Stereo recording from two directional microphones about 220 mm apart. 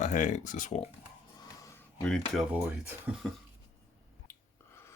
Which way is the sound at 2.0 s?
Centre (ahead or behind).